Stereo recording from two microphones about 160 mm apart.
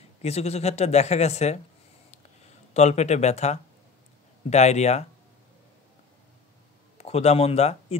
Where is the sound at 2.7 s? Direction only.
45° left (ahead or behind).